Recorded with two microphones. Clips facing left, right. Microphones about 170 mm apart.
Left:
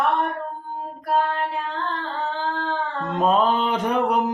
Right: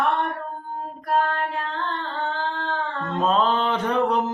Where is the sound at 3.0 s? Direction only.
10° left (ahead or behind).